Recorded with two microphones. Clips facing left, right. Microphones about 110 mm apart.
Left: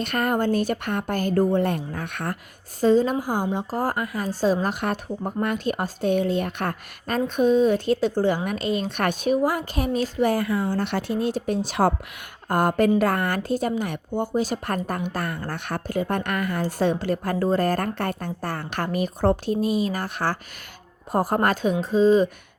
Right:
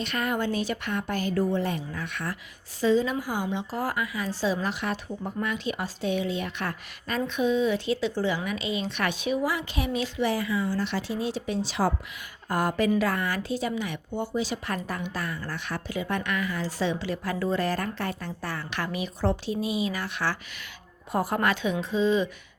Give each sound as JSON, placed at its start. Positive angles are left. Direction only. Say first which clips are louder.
{"t": 0.0, "sound": "speech", "louder": "left 5 dB", "side_deg": 50}